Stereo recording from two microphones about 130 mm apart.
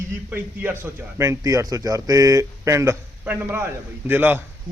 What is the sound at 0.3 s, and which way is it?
A man's voice, 15° right (ahead or behind).